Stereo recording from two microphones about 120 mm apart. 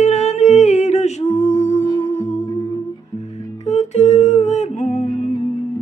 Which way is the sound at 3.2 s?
65° left (ahead or behind).